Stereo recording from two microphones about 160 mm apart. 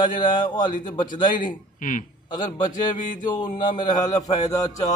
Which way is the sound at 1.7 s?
55° left (ahead or behind).